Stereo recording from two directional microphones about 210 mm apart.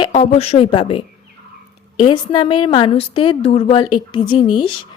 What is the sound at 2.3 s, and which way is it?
Speech, 25° left (ahead or behind).